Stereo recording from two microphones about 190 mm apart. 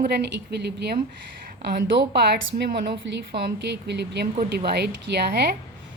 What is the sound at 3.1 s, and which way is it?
A woman's voice, 65° right (ahead or behind).